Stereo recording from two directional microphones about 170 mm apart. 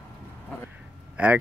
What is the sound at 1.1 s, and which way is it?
Speech, 10° right (ahead or behind).